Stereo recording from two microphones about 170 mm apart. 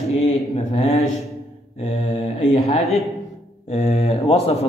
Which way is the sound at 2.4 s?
40° left (ahead or behind).